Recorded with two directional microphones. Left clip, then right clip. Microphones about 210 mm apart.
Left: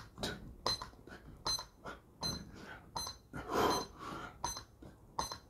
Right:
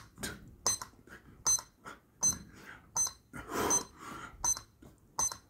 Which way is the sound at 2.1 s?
5° right (ahead or behind).